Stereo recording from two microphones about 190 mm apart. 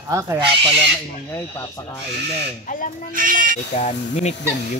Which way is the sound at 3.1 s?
45° right (ahead or behind).